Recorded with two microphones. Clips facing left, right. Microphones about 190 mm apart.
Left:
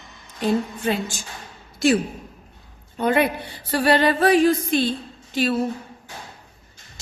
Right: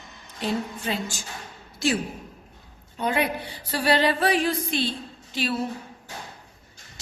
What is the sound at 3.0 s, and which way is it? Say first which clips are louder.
Speech: left 5 dB; 55° left (ahead or behind).